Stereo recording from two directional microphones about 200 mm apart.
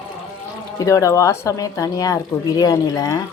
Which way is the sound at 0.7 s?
15° left (ahead or behind).